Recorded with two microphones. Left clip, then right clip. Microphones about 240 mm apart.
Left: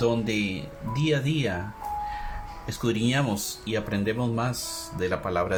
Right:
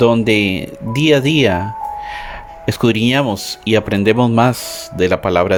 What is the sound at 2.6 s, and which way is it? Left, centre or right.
Speech, right.